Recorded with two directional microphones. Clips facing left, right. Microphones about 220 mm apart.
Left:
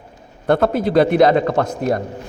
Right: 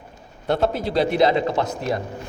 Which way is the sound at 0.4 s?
55° left (ahead or behind).